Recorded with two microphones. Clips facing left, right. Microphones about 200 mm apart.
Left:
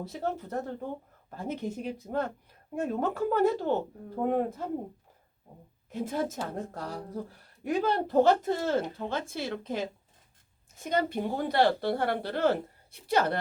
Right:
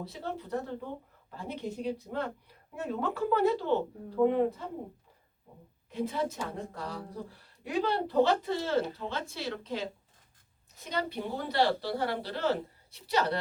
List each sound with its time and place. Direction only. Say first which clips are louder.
0.0 s a woman's voice: left 4 dB; 45° left (ahead or behind)
5.9 s a woman's voice: left 1 dB; 45° left (ahead or behind)